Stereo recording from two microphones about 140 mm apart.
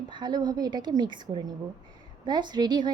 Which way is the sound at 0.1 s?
30° right (ahead or behind).